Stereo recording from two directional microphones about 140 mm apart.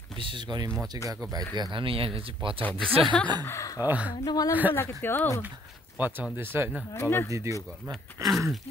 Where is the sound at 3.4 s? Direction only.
20° left (ahead or behind).